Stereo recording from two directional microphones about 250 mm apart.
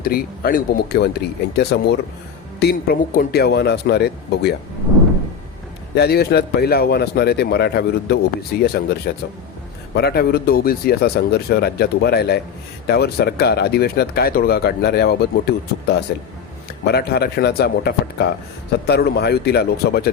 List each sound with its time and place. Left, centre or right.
0.0 s speech: left
2.6 s speech: left
5.9 s speech: left